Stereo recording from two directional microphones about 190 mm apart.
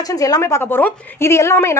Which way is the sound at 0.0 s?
20° left (ahead or behind).